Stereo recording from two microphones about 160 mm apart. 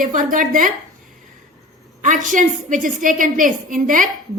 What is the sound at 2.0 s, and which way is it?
A woman's voice, 55° right (ahead or behind).